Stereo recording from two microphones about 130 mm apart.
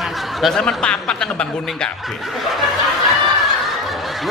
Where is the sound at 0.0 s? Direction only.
Centre (ahead or behind).